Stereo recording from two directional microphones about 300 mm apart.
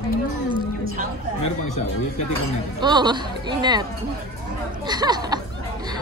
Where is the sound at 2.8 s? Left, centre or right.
Centre.